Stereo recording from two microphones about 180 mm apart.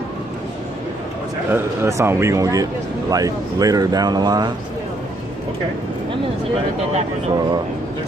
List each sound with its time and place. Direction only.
1.5 s a man's voice: 15° right (ahead or behind)